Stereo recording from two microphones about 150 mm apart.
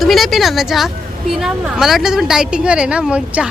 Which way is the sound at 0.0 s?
Centre (ahead or behind).